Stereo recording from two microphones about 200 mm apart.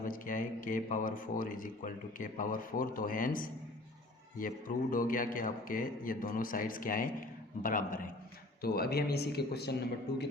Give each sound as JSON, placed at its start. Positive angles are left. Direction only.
{"t": 0.0, "sound": "a man's voice", "side_deg": 45}